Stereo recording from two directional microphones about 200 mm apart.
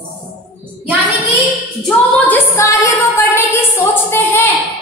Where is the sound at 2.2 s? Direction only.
10° left (ahead or behind).